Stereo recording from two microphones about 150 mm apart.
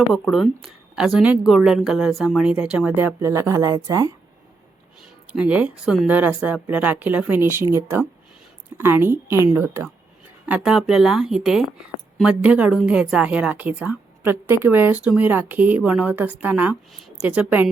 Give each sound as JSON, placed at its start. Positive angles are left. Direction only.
{"t": 0.1, "sound": "a woman's voice", "side_deg": 0}
{"t": 5.3, "sound": "a woman's voice", "side_deg": -10}